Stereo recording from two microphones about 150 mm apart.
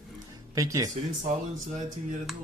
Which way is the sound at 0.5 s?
20° right (ahead or behind).